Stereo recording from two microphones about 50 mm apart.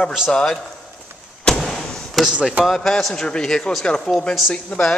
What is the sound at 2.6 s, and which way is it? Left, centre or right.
A man's voice, centre.